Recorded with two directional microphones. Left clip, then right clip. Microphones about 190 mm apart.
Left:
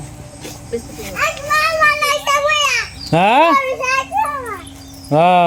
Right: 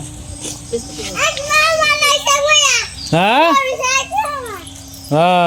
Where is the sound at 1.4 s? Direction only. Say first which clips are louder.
Even; 50° right (ahead or behind).